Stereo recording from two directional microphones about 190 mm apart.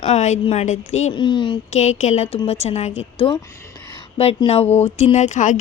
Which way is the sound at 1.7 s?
35° left (ahead or behind).